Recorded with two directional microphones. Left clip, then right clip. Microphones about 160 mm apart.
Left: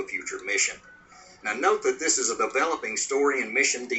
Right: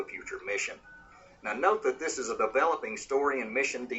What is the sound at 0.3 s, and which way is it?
Speech, 30° left (ahead or behind).